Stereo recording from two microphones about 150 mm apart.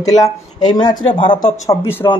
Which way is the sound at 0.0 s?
25° left (ahead or behind).